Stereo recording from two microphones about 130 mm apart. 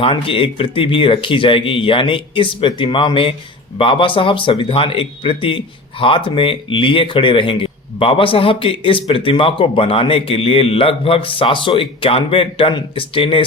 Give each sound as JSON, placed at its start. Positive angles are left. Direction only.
{"t": 0.0, "sound": "speech", "side_deg": 45}